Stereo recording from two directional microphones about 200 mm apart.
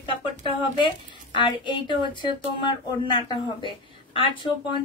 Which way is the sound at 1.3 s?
25° left (ahead or behind).